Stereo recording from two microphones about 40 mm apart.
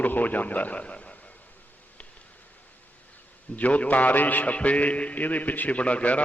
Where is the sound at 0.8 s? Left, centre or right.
Left.